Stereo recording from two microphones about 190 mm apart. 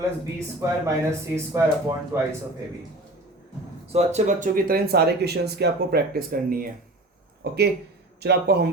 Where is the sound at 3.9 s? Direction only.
35° right (ahead or behind).